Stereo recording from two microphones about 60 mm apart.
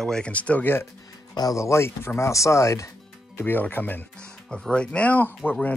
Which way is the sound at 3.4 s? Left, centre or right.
Left.